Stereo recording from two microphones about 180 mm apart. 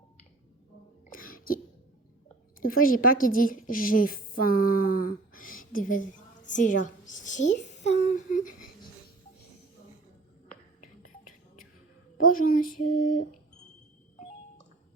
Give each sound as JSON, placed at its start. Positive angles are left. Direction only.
{"t": 1.1, "sound": "throat clearing", "side_deg": 50}
{"t": 2.6, "sound": "a woman's voice", "side_deg": 50}
{"t": 12.3, "sound": "female singing", "side_deg": 50}